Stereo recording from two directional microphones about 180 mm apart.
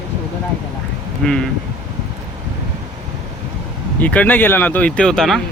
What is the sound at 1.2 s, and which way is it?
Speech, 5° left (ahead or behind).